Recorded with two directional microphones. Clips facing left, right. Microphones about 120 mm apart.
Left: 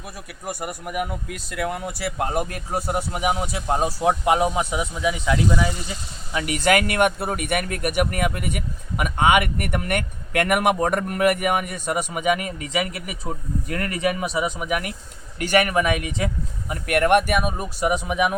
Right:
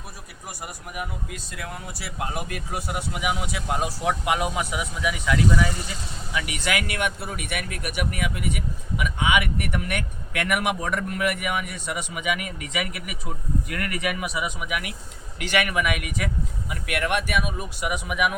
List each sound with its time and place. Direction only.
0.4 s speech: 60° left (ahead or behind); by 5.7 s 25° left (ahead or behind)
6.3 s speech: 45° left (ahead or behind); by 16.3 s 25° left (ahead or behind)
16.6 s speech: 45° left (ahead or behind); by 18.3 s 30° left (ahead or behind)